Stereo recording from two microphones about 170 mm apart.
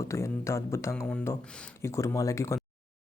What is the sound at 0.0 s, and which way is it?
Speech, 15° left (ahead or behind).